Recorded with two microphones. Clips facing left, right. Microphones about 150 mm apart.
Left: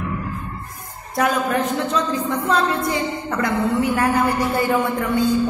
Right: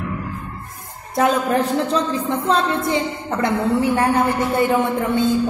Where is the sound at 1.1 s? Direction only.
25° right (ahead or behind).